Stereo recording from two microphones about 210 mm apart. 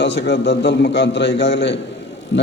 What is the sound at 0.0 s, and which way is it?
A man's voice, 55° left (ahead or behind).